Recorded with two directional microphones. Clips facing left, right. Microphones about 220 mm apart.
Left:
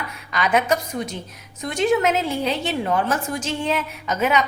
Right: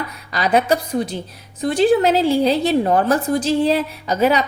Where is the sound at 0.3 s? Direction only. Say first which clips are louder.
Right 3 dB; 35° right (ahead or behind).